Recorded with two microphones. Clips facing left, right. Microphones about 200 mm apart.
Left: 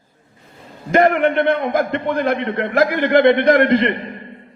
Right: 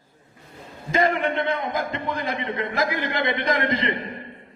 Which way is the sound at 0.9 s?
65° left (ahead or behind).